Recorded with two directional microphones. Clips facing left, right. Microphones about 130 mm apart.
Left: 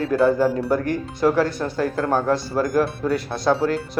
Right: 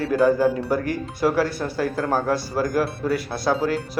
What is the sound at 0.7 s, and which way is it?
Speech, 50° left (ahead or behind).